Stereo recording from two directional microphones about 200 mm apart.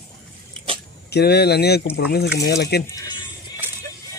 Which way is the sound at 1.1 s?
55° left (ahead or behind).